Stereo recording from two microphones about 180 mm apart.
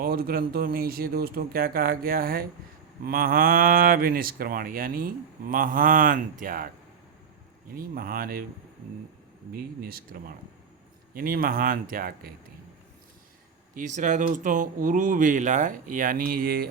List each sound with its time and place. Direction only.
0.0 s speech: 55° right (ahead or behind)
7.8 s speech: 55° right (ahead or behind)
9.5 s speech: 55° right (ahead or behind)
13.7 s speech: 45° right (ahead or behind)